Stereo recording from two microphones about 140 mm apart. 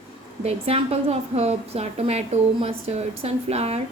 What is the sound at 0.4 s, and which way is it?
A woman's voice, 45° right (ahead or behind).